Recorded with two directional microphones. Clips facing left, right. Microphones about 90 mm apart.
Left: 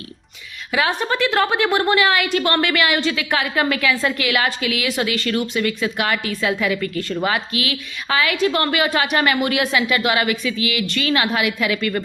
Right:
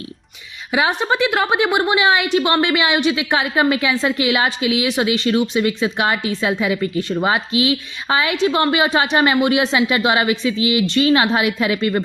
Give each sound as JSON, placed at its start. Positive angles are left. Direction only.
{"t": 0.7, "sound": "a woman's voice", "side_deg": -20}